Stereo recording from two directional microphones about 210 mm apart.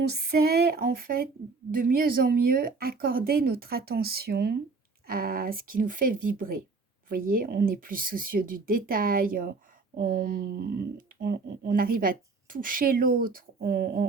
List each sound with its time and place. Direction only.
0.1 s speech: 50° right (ahead or behind)